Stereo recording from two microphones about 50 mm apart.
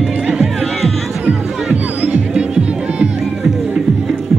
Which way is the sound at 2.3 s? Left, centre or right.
Centre.